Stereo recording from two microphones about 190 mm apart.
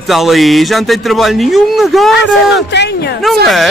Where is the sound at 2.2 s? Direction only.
65° left (ahead or behind).